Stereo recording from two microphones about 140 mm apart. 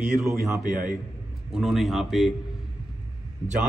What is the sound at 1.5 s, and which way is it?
Speech, centre (ahead or behind).